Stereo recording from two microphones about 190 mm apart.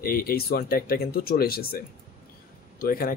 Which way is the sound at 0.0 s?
50° left (ahead or behind).